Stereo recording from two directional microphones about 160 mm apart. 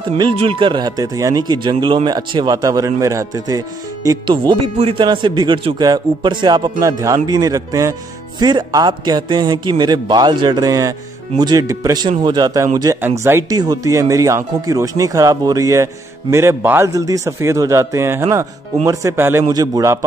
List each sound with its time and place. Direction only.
0.4 s speech: 35° right (ahead or behind)